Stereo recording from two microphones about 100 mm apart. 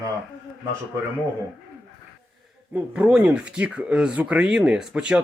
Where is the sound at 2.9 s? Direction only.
10° right (ahead or behind).